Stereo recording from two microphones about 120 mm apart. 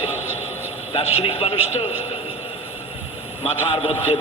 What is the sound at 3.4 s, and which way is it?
Speech, 55° left (ahead or behind).